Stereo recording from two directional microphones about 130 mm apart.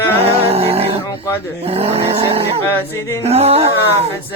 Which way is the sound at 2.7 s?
15° left (ahead or behind).